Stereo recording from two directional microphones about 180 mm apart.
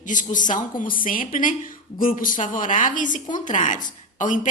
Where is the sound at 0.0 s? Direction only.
45° left (ahead or behind).